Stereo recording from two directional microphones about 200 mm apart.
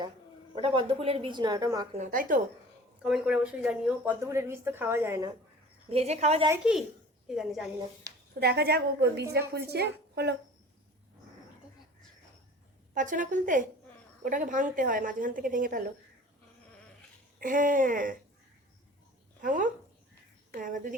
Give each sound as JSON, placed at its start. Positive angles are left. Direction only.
{"t": 0.5, "sound": "a woman's voice", "side_deg": -25}
{"t": 2.0, "sound": "a woman's voice", "side_deg": -45}
{"t": 3.0, "sound": "speech", "side_deg": -5}
{"t": 5.9, "sound": "a woman's voice", "side_deg": -30}
{"t": 6.5, "sound": "a woman's voice", "side_deg": -5}
{"t": 8.4, "sound": "a woman's voice", "side_deg": -55}
{"t": 12.9, "sound": "a woman's voice", "side_deg": -40}
{"t": 17.4, "sound": "a woman's voice", "side_deg": -40}
{"t": 19.4, "sound": "a woman's voice", "side_deg": -40}